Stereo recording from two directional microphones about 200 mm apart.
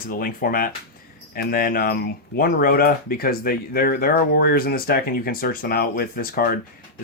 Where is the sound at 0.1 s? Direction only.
45° left (ahead or behind).